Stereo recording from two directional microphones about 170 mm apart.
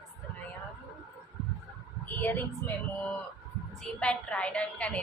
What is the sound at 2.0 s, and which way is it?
A woman's voice, 10° left (ahead or behind).